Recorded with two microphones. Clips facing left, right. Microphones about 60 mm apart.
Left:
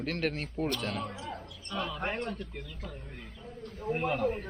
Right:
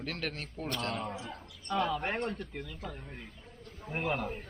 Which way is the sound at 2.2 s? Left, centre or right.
Right.